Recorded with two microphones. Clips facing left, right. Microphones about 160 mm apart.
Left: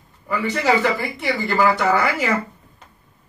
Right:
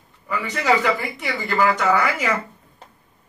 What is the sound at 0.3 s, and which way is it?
Speech, 35° left (ahead or behind).